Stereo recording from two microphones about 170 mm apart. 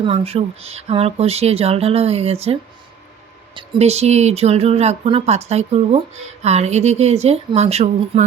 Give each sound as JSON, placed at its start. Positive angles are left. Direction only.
{"t": 0.0, "sound": "speech", "side_deg": -35}